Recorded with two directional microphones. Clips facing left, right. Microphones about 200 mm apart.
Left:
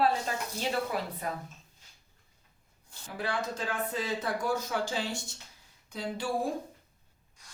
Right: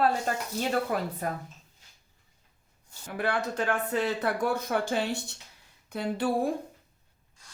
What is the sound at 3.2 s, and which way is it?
Speech, 60° right (ahead or behind).